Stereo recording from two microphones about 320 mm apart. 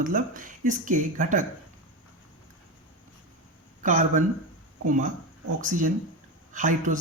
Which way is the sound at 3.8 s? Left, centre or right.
Right.